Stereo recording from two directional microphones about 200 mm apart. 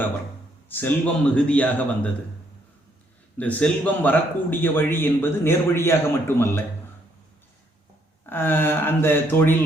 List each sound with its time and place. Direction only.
0.7 s speech: 10° left (ahead or behind)
3.3 s speech: 5° left (ahead or behind)
8.3 s speech: 10° left (ahead or behind)